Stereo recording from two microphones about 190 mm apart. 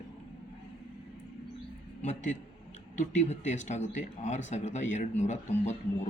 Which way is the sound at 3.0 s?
40° left (ahead or behind).